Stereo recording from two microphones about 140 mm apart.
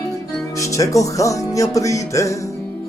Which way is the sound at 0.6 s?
20° left (ahead or behind).